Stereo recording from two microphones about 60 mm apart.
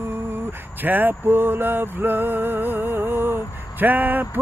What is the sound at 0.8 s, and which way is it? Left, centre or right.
Music, right.